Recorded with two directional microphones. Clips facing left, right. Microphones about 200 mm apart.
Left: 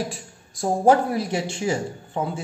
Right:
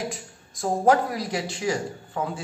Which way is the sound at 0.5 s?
30° left (ahead or behind).